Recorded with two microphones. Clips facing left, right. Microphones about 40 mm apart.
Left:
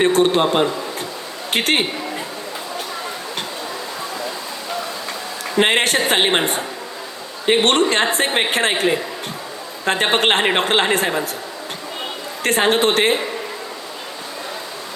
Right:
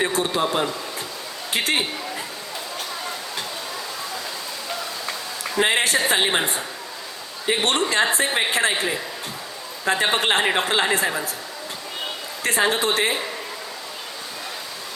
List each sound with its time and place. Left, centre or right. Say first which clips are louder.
0.0 s a woman's voice: left 7 dB; left
5.5 s a woman's voice: left 4 dB; left
12.4 s a woman's voice: left 5 dB; left